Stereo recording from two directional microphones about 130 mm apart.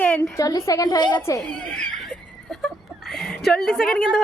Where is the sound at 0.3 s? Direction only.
20° left (ahead or behind).